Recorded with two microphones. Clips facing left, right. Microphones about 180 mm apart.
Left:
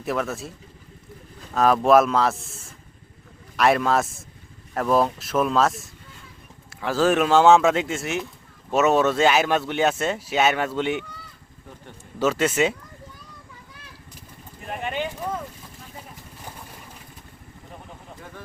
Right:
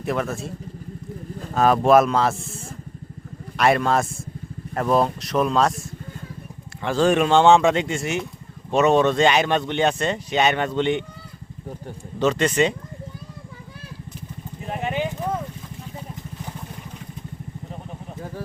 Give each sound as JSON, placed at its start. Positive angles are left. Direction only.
{"t": 0.0, "sound": "speech", "side_deg": 0}
{"t": 1.5, "sound": "speech", "side_deg": 0}
{"t": 3.6, "sound": "speech", "side_deg": 0}
{"t": 6.8, "sound": "speech", "side_deg": 5}
{"t": 12.2, "sound": "speech", "side_deg": 5}
{"t": 14.6, "sound": "clip-clop", "side_deg": -20}